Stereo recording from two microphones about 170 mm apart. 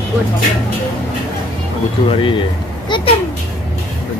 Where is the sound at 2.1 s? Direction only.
30° left (ahead or behind).